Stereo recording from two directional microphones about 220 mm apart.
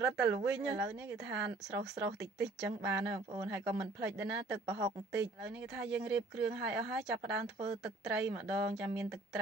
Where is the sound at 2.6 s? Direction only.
5° right (ahead or behind).